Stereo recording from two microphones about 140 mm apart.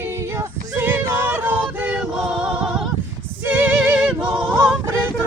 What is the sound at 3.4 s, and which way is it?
Music, 15° right (ahead or behind).